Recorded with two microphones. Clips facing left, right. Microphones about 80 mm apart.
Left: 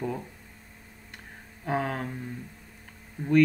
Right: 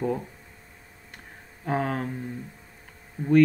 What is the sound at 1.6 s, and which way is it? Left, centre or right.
Speech, centre.